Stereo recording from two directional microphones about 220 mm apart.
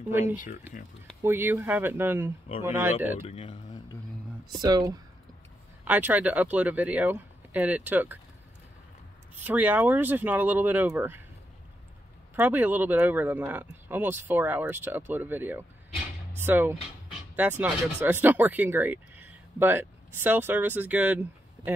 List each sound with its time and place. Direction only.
1.2 s speech: 10° right (ahead or behind)
3.3 s speech: 25° left (ahead or behind)
4.5 s speech: 20° right (ahead or behind)
9.4 s speech: 5° right (ahead or behind)
12.4 s speech: 10° right (ahead or behind)